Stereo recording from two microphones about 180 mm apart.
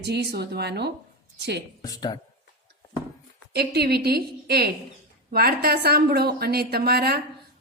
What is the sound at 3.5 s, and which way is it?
Speech, 60° right (ahead or behind).